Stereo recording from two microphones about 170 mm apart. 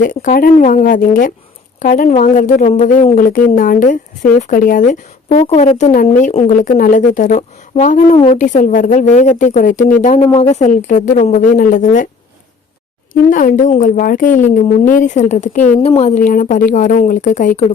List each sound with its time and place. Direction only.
0.2 s speech: 55° left (ahead or behind)
3.2 s speech: 55° left (ahead or behind)
8.1 s speech: 30° left (ahead or behind)
8.4 s speech: 45° left (ahead or behind)
13.3 s speech: 50° left (ahead or behind)
15.9 s speech: 35° left (ahead or behind)
16.1 s speech: 50° left (ahead or behind)